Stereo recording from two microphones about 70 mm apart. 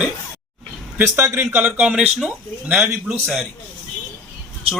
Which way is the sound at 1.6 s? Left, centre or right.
Centre.